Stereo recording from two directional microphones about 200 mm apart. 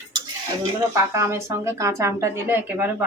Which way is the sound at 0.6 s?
15° right (ahead or behind).